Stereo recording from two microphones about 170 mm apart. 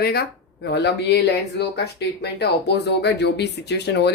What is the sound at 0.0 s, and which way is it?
Speech, 70° left (ahead or behind).